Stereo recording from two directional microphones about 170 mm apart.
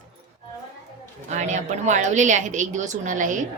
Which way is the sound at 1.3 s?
45° right (ahead or behind).